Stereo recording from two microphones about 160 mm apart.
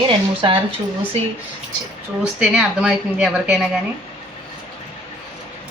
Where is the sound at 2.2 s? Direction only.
5° right (ahead or behind).